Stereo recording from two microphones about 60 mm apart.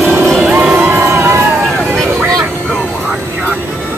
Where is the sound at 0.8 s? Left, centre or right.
Right.